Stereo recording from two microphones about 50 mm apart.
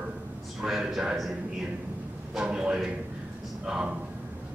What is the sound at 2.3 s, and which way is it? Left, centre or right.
A man's voice, centre.